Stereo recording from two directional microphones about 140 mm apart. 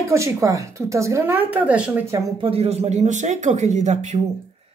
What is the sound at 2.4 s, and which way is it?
Speech, 45° right (ahead or behind).